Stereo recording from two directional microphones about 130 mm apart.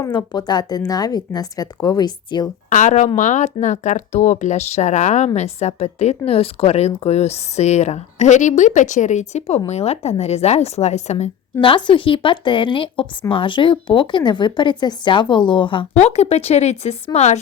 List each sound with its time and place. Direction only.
0.0 s speech: 35° left (ahead or behind)
2.6 s speech: 70° left (ahead or behind)
11.6 s speech: 40° left (ahead or behind)
16.0 s speech: 55° left (ahead or behind)